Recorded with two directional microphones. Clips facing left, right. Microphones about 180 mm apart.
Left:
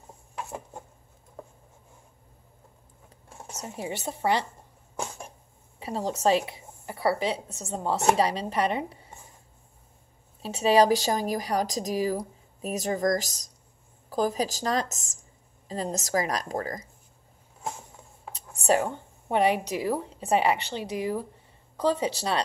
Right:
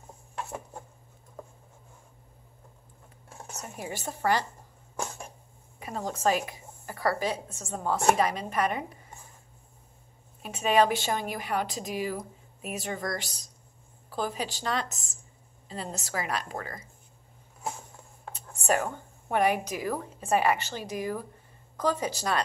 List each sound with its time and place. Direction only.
3.4 s a woman's voice: 25° left (ahead or behind)
4.9 s a sound: 10° left (ahead or behind)
5.8 s a woman's voice: 30° left (ahead or behind)
10.4 s a woman's voice: 30° left (ahead or behind)
18.9 s a woman's voice: 25° left (ahead or behind)